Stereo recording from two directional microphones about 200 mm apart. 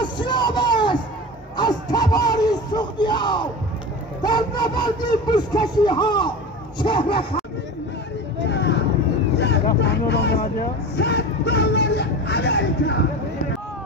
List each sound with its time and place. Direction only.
0.0 s a sound: 20° left (ahead or behind)
4.2 s speech: 20° left (ahead or behind)
8.5 s vehicle: 60° left (ahead or behind)